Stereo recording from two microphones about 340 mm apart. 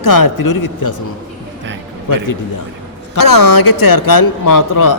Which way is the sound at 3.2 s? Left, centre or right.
Left.